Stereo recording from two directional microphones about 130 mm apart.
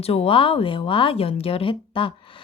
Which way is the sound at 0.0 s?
50° left (ahead or behind).